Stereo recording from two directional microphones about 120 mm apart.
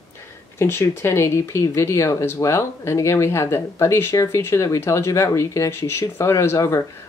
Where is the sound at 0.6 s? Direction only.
20° left (ahead or behind).